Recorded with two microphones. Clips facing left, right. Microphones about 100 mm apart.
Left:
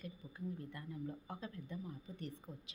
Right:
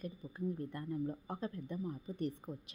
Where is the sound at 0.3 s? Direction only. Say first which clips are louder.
Right 6 dB; 45° right (ahead or behind).